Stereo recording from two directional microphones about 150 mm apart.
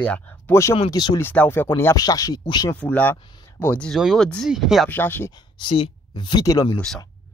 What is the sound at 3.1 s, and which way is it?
Speech, 30° left (ahead or behind).